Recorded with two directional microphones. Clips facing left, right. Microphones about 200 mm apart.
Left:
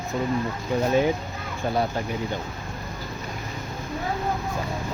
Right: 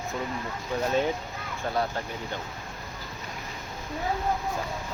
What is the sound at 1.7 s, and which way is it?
Speech, 10° left (ahead or behind).